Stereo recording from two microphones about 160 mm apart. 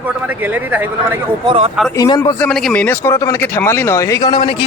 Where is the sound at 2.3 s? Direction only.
5° left (ahead or behind).